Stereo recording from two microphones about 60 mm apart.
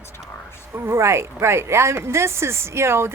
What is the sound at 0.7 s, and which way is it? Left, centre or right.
Speech, right.